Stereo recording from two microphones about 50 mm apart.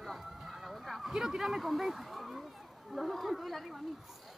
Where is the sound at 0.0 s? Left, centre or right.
Centre.